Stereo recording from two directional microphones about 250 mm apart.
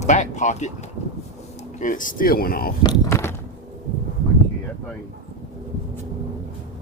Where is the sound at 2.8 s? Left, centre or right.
Centre.